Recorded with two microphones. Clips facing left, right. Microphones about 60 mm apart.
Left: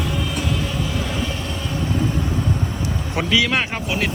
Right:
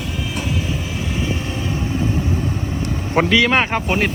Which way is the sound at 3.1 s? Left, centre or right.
Right.